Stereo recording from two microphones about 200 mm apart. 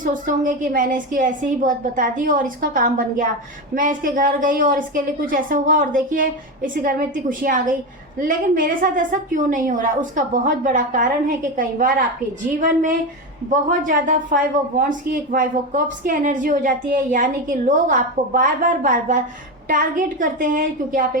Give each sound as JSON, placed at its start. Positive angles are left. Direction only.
{"t": 0.0, "sound": "a woman's voice", "side_deg": -40}